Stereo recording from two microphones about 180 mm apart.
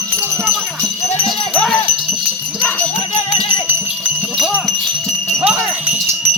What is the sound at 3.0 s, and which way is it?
Music, 35° left (ahead or behind).